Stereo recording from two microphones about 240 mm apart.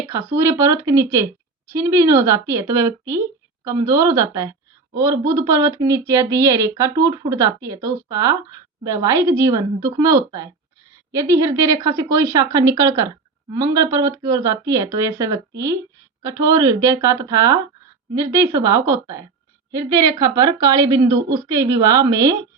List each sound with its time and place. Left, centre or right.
0.1 s speech: centre